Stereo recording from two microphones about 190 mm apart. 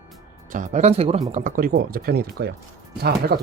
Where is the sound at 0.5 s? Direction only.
40° right (ahead or behind).